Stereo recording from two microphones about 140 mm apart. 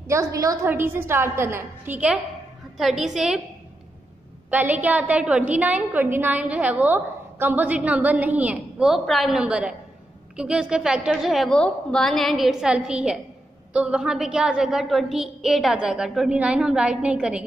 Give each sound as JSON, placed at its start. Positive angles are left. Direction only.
{"t": 0.0, "sound": "a woman's voice", "side_deg": -20}
{"t": 4.5, "sound": "a woman's voice", "side_deg": -10}